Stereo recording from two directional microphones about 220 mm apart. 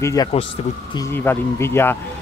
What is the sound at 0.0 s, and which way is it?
Speech, 15° left (ahead or behind).